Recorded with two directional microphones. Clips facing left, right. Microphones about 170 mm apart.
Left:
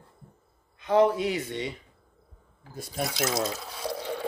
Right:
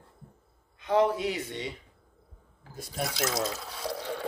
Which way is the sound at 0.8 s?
55° left (ahead or behind).